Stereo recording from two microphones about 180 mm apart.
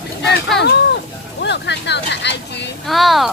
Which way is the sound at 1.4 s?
75° left (ahead or behind).